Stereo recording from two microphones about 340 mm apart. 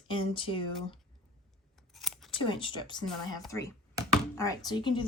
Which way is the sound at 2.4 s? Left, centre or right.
Centre.